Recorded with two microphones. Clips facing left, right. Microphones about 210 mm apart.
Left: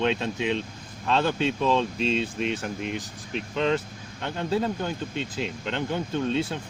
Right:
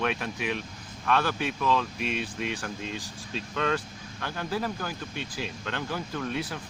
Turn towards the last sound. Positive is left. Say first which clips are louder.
# left 6 dB
turn(degrees=25)  # may be behind; listen again after turning